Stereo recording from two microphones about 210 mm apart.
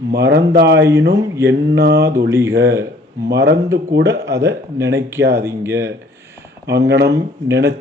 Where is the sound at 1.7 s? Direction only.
55° right (ahead or behind).